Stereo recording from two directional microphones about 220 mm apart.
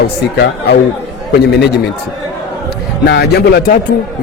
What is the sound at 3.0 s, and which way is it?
Speech, 50° left (ahead or behind).